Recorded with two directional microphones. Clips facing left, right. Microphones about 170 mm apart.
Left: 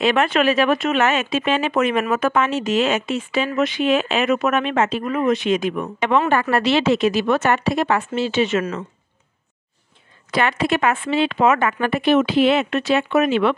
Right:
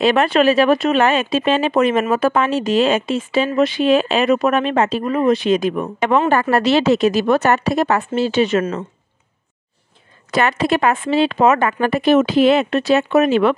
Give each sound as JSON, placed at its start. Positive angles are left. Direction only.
{"t": 0.0, "sound": "speech", "side_deg": -35}
{"t": 10.3, "sound": "speech", "side_deg": -40}